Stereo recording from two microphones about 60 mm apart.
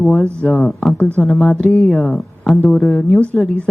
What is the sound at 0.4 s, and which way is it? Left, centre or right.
Speech, left.